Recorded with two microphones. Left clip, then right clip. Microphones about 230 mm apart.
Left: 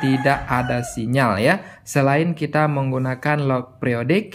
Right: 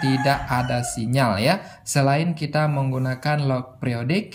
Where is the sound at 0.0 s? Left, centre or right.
Centre.